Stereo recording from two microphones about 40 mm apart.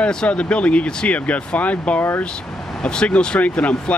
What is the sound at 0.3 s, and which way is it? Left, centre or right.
Speech, left.